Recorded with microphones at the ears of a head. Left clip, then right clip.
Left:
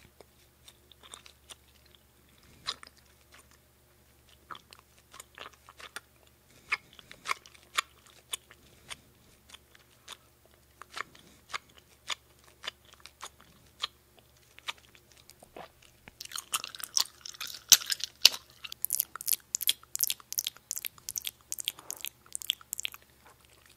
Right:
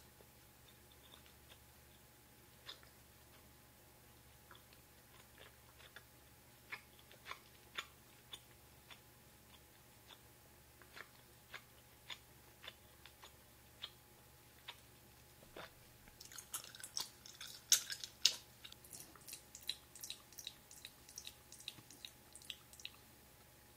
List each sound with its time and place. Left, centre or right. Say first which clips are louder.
0.2 s biting: left 7 dB; left
4.5 s biting: left 17 dB; left
6.7 s scissors: left 18 dB; left
8.3 s biting: left 14 dB; left
10.8 s scissors: left 16 dB; left
12.6 s a sound: left 14 dB; left
15.4 s chewing: left 7 dB; left